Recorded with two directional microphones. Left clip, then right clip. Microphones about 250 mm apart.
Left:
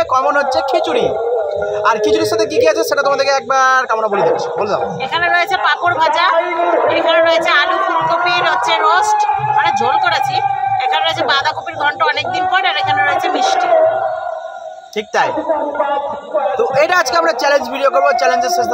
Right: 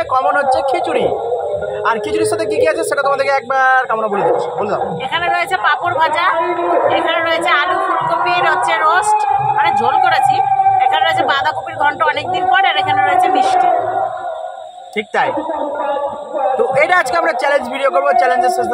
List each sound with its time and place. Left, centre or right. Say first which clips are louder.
0.1 s speech: even; centre
5.1 s speech: left 3 dB; centre
16.7 s speech: left 2 dB; centre